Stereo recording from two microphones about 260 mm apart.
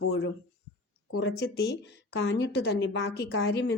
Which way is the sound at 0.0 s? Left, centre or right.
Left.